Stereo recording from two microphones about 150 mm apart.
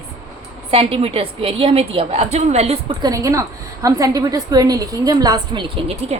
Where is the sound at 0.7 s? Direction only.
40° right (ahead or behind).